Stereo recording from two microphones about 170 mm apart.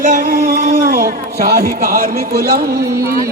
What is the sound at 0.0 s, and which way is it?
A man's voice, 55° right (ahead or behind).